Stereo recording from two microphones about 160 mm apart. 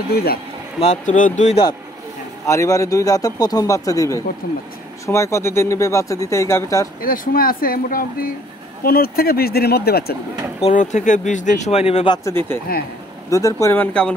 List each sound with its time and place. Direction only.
0.1 s speech: 75° left (ahead or behind)
0.7 s speech: 45° left (ahead or behind)
2.4 s speech: 20° left (ahead or behind)
4.4 s speech: 65° left (ahead or behind)
5.0 s speech: 20° left (ahead or behind)
7.0 s speech: 60° left (ahead or behind); by 10.1 s 80° left
10.6 s speech: 50° left (ahead or behind)
12.3 s speech: 15° left (ahead or behind)